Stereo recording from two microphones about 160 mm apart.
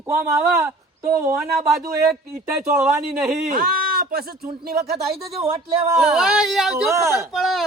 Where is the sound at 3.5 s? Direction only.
65° right (ahead or behind).